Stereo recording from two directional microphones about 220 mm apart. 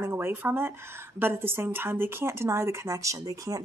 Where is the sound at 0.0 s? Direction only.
10° right (ahead or behind).